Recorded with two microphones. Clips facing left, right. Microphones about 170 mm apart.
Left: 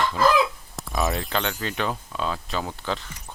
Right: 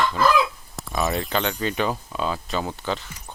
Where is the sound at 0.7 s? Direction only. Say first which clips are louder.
Right 1 dB; centre (ahead or behind).